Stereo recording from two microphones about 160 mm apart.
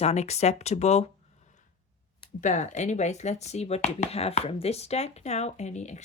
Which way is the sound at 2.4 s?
50° left (ahead or behind).